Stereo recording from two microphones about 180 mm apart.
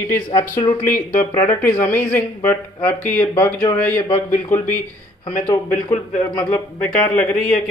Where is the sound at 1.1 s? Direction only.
45° left (ahead or behind).